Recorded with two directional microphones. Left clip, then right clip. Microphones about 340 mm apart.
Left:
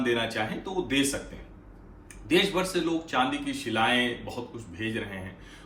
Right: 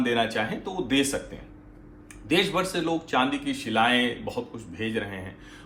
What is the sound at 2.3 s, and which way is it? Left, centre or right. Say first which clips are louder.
Speech: right 1 dB; centre.